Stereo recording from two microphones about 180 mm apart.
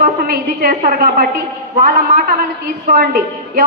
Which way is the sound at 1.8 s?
55° right (ahead or behind).